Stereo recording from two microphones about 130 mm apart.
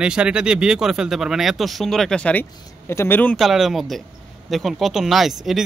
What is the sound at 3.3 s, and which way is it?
Speech, centre (ahead or behind).